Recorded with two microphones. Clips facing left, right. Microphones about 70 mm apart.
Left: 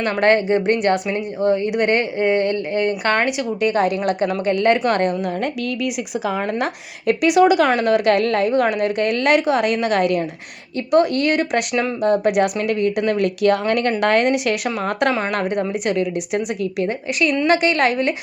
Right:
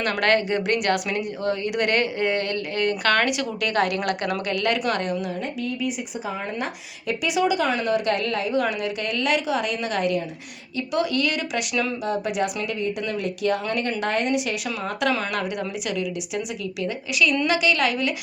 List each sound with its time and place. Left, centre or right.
0.0 s speech: left
4.4 s a woman's voice: left
5.8 s speech: left
7.1 s a woman's voice: left
15.3 s a woman's voice: left